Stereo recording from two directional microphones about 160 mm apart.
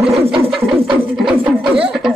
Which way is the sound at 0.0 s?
40° right (ahead or behind).